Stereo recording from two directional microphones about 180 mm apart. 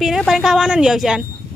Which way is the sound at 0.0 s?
Centre (ahead or behind).